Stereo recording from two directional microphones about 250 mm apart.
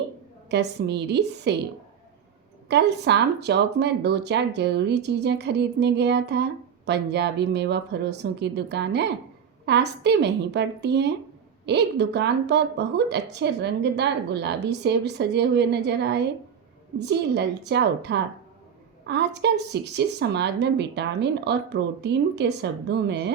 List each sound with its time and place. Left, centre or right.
0.5 s speech: right
2.6 s speech: right